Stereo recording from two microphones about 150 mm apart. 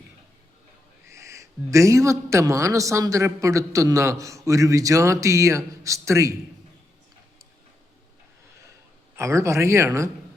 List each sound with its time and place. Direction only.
1.0 s a man's voice: 20° right (ahead or behind)
9.1 s a man's voice: 20° right (ahead or behind)